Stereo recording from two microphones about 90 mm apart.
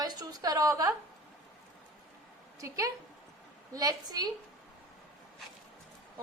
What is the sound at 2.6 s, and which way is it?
A woman's voice, 35° right (ahead or behind).